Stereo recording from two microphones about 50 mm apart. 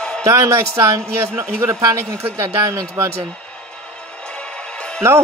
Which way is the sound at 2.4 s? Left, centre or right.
Right.